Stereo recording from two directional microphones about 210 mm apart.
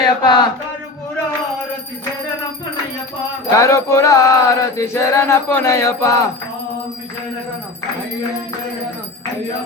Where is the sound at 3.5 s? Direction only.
15° left (ahead or behind).